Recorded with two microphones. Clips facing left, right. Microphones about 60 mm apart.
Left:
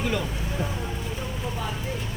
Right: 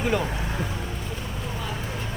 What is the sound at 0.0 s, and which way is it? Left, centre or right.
Speech, right.